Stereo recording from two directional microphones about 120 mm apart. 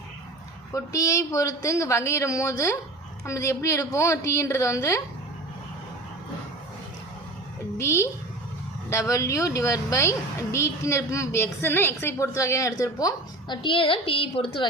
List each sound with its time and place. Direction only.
0.7 s speech: 25° left (ahead or behind)
7.8 s speech: 20° left (ahead or behind)
13.6 s a woman's voice: 45° left (ahead or behind)